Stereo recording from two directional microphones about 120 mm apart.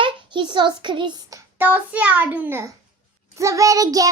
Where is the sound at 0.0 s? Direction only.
40° right (ahead or behind).